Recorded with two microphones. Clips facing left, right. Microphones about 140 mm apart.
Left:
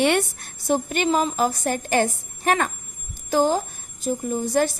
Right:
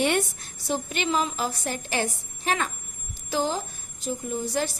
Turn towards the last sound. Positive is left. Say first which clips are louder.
# left 6 dB
turn(degrees=50)  # may be behind; listen again after turning